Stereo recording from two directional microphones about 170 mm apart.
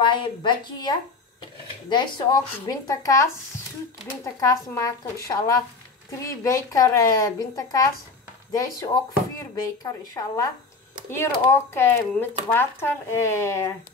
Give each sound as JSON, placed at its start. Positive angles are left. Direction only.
{"t": 0.0, "sound": "speech", "side_deg": 30}